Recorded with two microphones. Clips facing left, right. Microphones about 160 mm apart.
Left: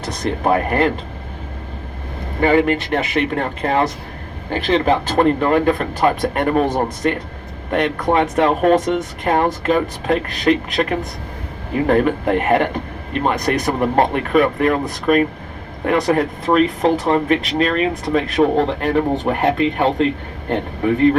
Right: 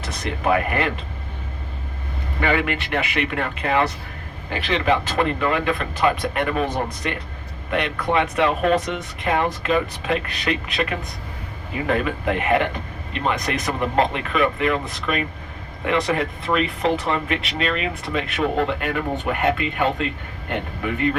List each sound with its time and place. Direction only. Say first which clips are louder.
0.4 s speech: left 4 dB; 40° left (ahead or behind)
2.4 s speech: left 7 dB; 40° left (ahead or behind)